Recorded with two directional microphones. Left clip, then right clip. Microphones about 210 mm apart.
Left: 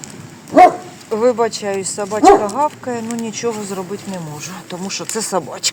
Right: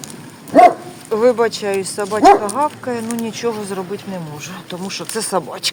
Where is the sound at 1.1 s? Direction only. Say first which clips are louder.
Right 1 dB; centre (ahead or behind).